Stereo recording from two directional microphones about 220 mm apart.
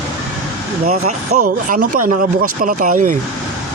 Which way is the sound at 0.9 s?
30° right (ahead or behind).